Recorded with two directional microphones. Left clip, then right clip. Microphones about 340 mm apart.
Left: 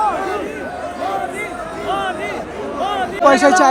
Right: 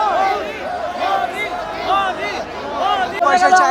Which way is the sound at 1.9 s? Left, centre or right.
Right.